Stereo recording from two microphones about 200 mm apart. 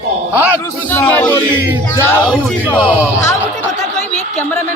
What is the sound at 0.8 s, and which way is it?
Speech, 10° left (ahead or behind).